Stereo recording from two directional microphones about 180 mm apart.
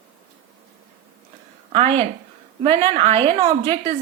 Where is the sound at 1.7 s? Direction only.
35° right (ahead or behind).